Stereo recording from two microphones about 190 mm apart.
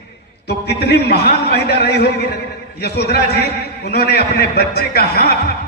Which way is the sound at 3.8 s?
60° left (ahead or behind).